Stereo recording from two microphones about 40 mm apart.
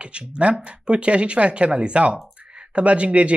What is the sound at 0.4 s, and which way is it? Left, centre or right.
Speech, right.